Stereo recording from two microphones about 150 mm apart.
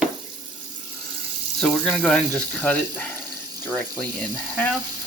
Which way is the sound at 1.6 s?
5° left (ahead or behind).